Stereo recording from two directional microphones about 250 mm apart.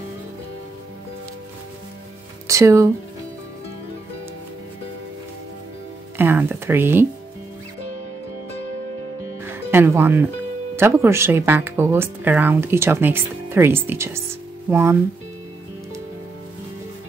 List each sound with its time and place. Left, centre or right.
2.4 s speech: centre
6.1 s speech: centre
9.4 s music: centre
10.8 s speech: centre